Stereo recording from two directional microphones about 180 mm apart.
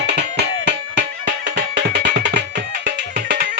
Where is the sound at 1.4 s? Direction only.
70° right (ahead or behind).